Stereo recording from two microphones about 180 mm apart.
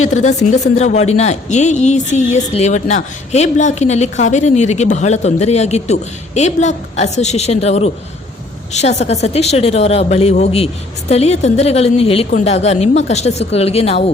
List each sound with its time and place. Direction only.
0.0 s speech: 40° left (ahead or behind)